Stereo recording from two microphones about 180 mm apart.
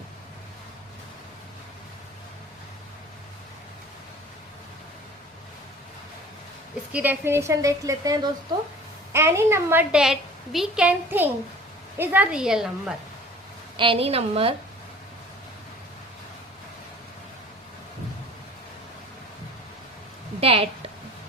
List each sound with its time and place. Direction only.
6.9 s a woman's voice: 10° right (ahead or behind)
9.1 s a woman's voice: 15° right (ahead or behind)
13.7 s a woman's voice: 30° right (ahead or behind)
20.4 s a woman's voice: 30° right (ahead or behind)